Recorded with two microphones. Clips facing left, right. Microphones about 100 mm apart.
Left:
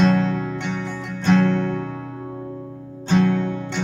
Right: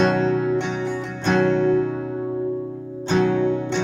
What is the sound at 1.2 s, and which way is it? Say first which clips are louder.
Music: left 1 dB; 15° right (ahead or behind).